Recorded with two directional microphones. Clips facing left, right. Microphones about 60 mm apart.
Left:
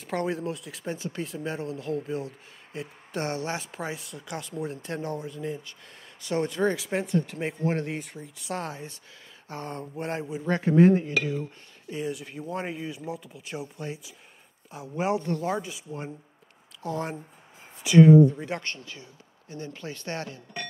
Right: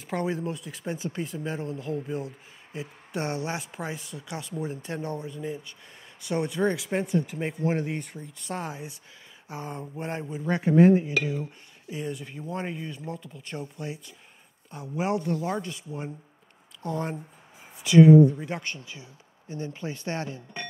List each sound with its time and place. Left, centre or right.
0.0 s speech: centre
0.9 s speech: right
1.2 s speech: centre
2.7 s speech: centre
3.7 s speech: centre
8.6 s speech: centre
10.4 s speech: centre
11.9 s speech: centre
18.8 s speech: centre